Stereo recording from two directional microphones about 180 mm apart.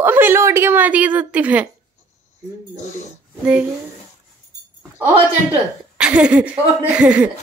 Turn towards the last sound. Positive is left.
turn(degrees=-5)  # may be behind; listen again after turning